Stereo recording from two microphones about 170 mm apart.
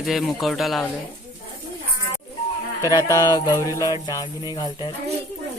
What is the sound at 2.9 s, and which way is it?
Music, 25° left (ahead or behind).